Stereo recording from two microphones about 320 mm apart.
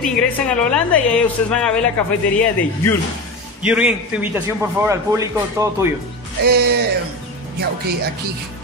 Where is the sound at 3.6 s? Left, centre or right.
Centre.